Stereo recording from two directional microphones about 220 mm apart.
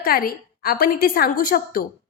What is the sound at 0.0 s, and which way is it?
A woman's voice, 40° left (ahead or behind).